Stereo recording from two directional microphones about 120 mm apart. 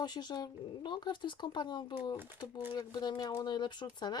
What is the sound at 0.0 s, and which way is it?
Speech, 35° left (ahead or behind).